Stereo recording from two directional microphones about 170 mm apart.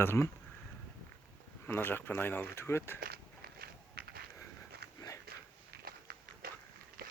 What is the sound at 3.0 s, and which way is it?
Biting, 65° right (ahead or behind).